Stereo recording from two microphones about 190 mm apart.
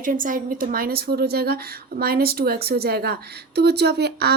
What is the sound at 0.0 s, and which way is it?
A woman's voice, 45° right (ahead or behind).